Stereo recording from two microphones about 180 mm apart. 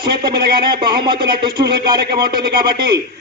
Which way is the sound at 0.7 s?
25° right (ahead or behind).